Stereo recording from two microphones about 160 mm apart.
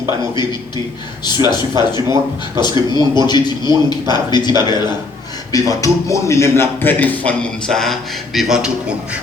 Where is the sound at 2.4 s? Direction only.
25° left (ahead or behind).